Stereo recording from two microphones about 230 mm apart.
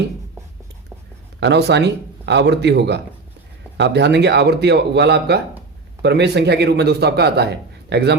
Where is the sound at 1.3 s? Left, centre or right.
Right.